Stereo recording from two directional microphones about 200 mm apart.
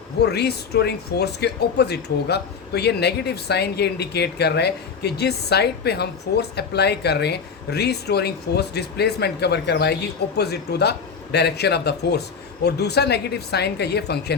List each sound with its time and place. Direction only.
0.2 s speech: 55° left (ahead or behind)